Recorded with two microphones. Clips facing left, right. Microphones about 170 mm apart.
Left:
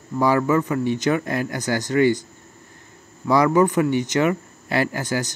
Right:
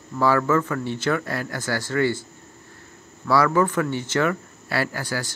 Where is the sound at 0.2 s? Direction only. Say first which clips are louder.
Left 1 dB; 15° left (ahead or behind).